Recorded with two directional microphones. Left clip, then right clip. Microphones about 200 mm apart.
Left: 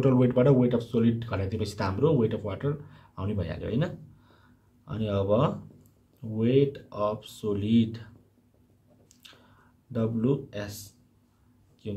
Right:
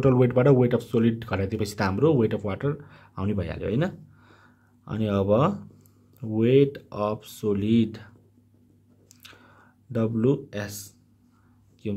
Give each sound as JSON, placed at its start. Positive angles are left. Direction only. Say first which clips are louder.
{"t": 0.0, "sound": "speech", "louder": "right 2 dB", "side_deg": -35}
{"t": 9.1, "sound": "chewing", "louder": "right 3 dB", "side_deg": -35}
{"t": 9.9, "sound": "speech", "louder": "right 4 dB", "side_deg": -40}